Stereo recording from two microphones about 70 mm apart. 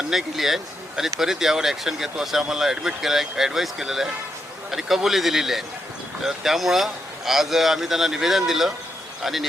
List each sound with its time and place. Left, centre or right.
0.1 s speech: centre